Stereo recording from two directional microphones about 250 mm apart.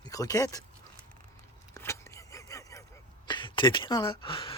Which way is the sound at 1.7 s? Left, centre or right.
Centre.